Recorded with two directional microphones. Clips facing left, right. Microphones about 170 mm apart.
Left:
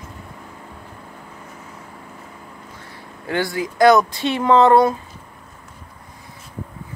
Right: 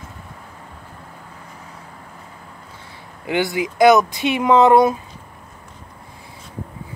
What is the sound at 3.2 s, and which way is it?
Speech, 20° right (ahead or behind).